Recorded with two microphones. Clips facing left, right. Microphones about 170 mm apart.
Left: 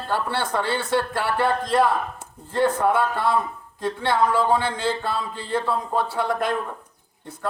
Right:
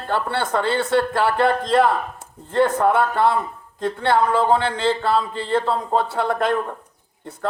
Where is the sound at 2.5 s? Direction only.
60° right (ahead or behind).